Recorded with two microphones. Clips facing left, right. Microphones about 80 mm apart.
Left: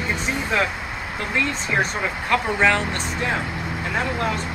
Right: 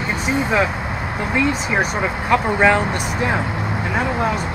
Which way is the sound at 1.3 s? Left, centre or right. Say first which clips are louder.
Right 4 dB; centre.